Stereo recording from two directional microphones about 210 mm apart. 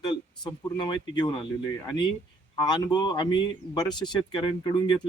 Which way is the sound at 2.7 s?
20° left (ahead or behind).